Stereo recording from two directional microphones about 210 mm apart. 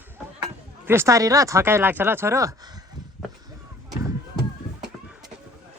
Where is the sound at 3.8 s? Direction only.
15° right (ahead or behind).